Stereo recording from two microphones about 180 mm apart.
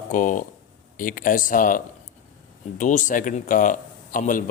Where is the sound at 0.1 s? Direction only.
45° left (ahead or behind).